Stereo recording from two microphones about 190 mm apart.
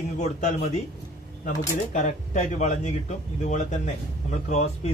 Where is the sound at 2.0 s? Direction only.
40° left (ahead or behind).